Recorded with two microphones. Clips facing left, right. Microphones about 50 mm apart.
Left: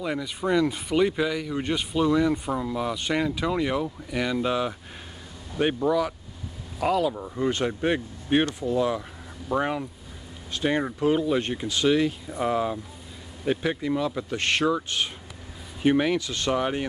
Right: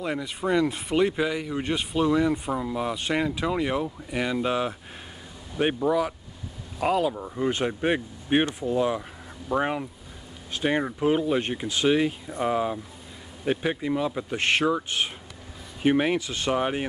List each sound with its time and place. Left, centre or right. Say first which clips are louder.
0.0 s speech: even; centre
5.9 s speech: even; centre
12.3 s speech: even; centre